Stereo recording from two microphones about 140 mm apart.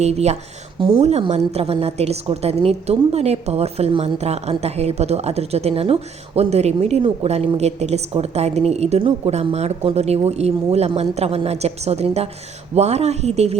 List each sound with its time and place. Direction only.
0.0 s a woman's voice: 50° right (ahead or behind)
0.8 s a woman's voice: 40° right (ahead or behind)